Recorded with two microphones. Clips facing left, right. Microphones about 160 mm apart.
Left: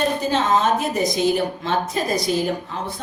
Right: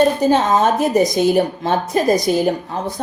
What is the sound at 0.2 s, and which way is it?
A woman's voice, 45° right (ahead or behind).